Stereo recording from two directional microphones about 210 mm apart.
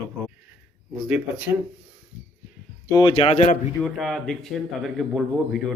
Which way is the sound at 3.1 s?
30° left (ahead or behind).